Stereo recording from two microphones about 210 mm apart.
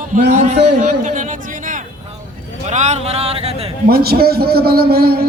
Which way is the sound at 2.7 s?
35° right (ahead or behind).